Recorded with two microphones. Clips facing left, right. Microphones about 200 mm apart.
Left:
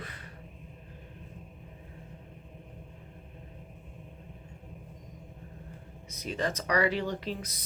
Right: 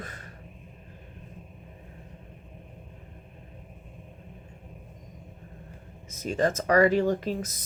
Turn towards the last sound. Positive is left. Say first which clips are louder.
# right 6 dB
turn(degrees=-45)  # may be behind; listen again after turning